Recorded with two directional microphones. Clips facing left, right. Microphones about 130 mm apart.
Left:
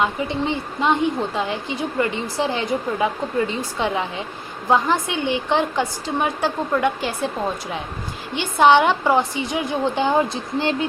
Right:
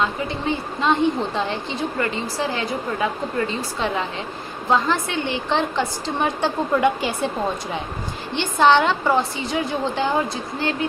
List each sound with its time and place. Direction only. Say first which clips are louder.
0.0 s a woman's voice: left 2 dB; 15° left (ahead or behind); by 7.3 s centre (ahead or behind)
8.4 s a woman's voice: left 2 dB; 10° left (ahead or behind)